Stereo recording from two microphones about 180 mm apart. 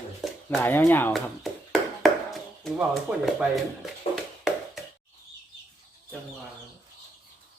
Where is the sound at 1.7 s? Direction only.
Centre (ahead or behind).